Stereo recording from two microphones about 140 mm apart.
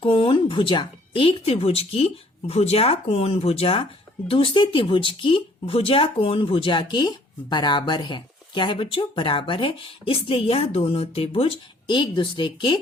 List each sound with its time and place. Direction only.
0.0 s speech: 40° left (ahead or behind)